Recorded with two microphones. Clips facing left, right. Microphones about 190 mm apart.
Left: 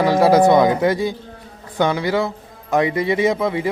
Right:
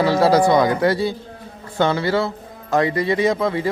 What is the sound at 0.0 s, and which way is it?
A man's voice, 15° left (ahead or behind).